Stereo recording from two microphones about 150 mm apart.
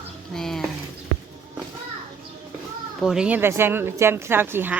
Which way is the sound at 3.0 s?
5° right (ahead or behind).